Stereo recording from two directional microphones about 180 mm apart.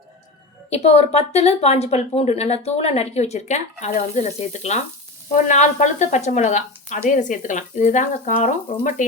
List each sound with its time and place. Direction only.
0.7 s a woman's voice: 35° left (ahead or behind)